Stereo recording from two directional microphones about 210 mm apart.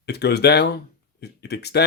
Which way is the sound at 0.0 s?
50° left (ahead or behind).